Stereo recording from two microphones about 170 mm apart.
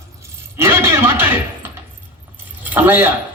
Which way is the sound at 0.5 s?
15° right (ahead or behind).